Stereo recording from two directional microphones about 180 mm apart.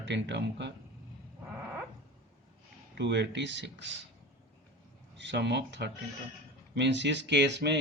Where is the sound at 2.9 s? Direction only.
75° right (ahead or behind).